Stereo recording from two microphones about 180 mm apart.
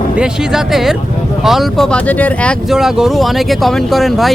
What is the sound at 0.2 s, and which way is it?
Speech, centre (ahead or behind).